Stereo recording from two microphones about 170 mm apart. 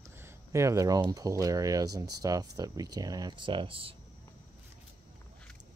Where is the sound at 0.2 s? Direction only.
15° right (ahead or behind); by 3.9 s 30° right (ahead or behind).